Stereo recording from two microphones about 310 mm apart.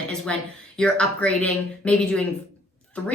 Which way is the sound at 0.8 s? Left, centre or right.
Centre.